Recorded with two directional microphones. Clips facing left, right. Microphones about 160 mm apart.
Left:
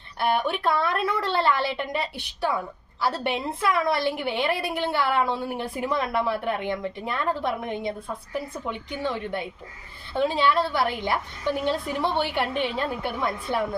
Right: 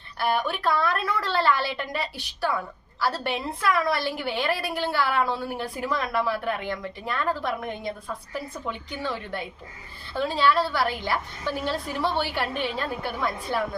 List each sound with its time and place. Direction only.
0.2 s a woman's voice: 20° left (ahead or behind)